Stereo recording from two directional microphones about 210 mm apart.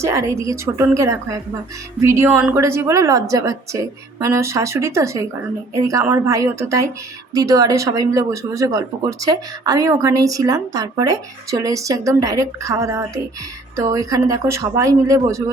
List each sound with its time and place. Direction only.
0.0 s speech: 15° right (ahead or behind)